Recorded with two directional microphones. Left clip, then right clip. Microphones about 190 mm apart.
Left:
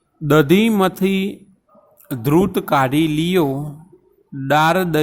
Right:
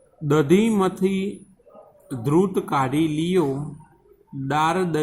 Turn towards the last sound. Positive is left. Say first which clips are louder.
# left 6 dB
turn(degrees=50)  # may be behind; listen again after turning